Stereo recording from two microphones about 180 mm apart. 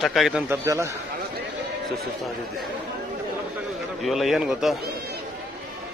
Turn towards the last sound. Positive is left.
turn(degrees=0)  # may be behind; listen again after turning